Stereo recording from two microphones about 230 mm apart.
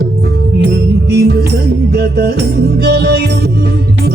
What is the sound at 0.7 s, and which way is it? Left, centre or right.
Music, right.